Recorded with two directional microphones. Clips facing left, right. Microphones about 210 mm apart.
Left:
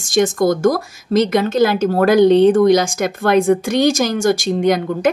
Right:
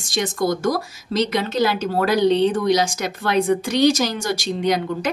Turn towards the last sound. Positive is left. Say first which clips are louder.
# left 6 dB
turn(degrees=50)  # may be behind; listen again after turning